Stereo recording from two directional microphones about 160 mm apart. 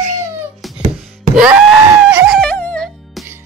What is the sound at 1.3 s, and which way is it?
Screaming, 5° right (ahead or behind).